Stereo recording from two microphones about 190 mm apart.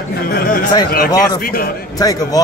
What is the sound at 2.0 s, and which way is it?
Speech, 20° left (ahead or behind).